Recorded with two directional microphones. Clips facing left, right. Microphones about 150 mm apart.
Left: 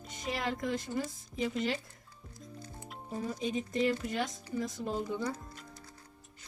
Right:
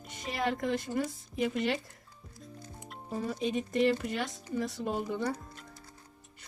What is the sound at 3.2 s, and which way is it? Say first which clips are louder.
Speech: right 2 dB; 65° right (ahead or behind).